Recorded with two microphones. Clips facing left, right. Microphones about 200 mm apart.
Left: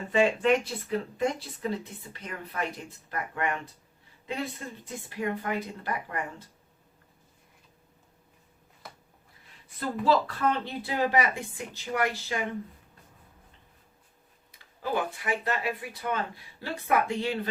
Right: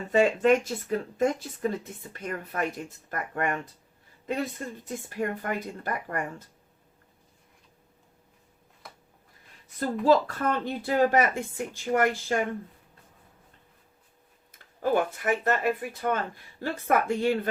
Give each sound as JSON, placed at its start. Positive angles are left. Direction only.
{"t": 0.1, "sound": "speech", "side_deg": -45}
{"t": 5.0, "sound": "speech", "side_deg": -45}
{"t": 8.8, "sound": "a sound", "side_deg": 0}
{"t": 10.0, "sound": "speech", "side_deg": -45}
{"t": 14.5, "sound": "speech", "side_deg": -50}